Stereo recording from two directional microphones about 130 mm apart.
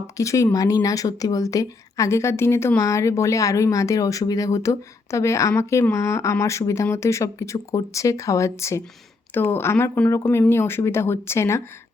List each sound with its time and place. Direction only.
0.2 s a woman's voice: 25° left (ahead or behind)